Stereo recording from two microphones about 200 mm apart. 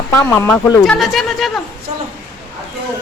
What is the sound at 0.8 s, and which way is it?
Speech, centre (ahead or behind).